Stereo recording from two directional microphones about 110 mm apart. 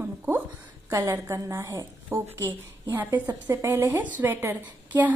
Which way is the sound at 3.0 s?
15° right (ahead or behind).